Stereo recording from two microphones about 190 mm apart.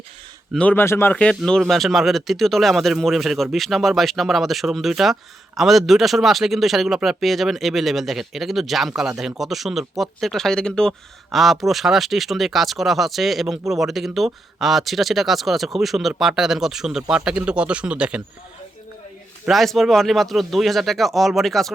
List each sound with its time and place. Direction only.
0.5 s speech: 10° left (ahead or behind)
19.5 s speech: centre (ahead or behind)